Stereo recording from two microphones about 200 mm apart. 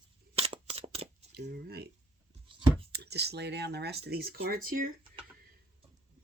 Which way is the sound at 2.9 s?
55° right (ahead or behind).